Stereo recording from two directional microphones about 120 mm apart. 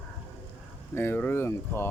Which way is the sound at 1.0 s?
15° left (ahead or behind).